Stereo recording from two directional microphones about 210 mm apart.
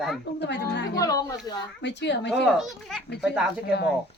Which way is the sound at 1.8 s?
55° left (ahead or behind).